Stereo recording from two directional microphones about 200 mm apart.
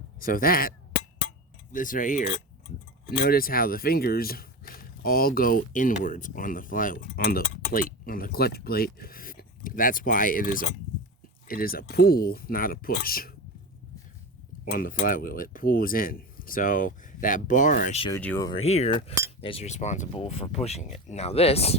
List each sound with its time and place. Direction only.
0.2 s speech: 45° left (ahead or behind)
1.7 s speech: 40° left (ahead or behind)
14.6 s speech: 45° left (ahead or behind)
18.1 s speech: 10° left (ahead or behind)
18.4 s speech: 30° left (ahead or behind)